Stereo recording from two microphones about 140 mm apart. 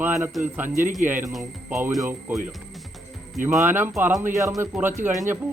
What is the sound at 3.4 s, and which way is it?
Speech, 15° right (ahead or behind).